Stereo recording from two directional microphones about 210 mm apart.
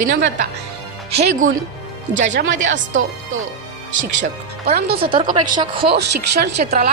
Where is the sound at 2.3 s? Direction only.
60° right (ahead or behind).